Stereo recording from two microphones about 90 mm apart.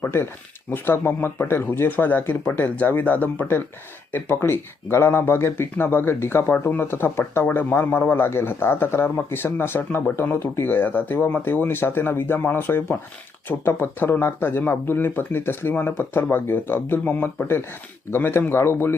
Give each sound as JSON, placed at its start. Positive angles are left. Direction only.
{"t": 0.0, "sound": "speech", "side_deg": 25}